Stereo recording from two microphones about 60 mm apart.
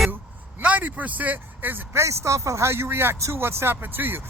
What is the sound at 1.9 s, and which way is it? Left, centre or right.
Speech, right.